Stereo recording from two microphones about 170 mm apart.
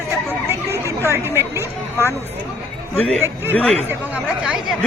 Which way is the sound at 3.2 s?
15° right (ahead or behind).